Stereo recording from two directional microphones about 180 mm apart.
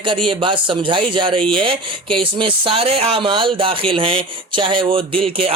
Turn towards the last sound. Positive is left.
turn(degrees=-30)  # may be behind; listen again after turning